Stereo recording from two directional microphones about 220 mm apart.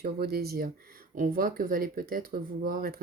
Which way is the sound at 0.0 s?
45° right (ahead or behind).